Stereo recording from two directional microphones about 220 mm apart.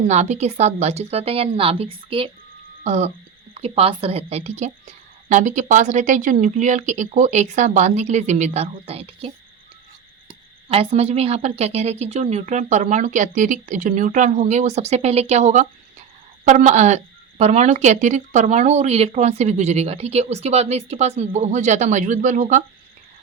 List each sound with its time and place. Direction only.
0.1 s a woman's voice: 30° right (ahead or behind)